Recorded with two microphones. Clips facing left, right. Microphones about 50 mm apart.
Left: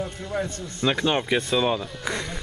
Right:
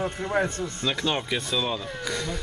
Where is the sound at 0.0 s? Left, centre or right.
Right.